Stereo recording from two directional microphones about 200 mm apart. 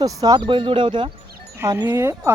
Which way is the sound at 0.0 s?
15° right (ahead or behind).